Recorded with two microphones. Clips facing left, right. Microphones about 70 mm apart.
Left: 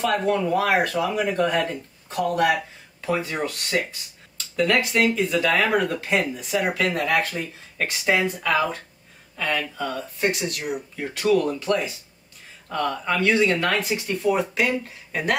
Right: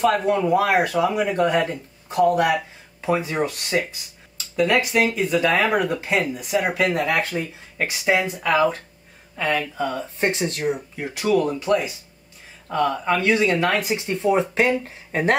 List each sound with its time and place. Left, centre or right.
0.0 s speech: centre
6.1 s speech: centre
6.6 s speech: right
11.0 s speech: centre; by 15.3 s right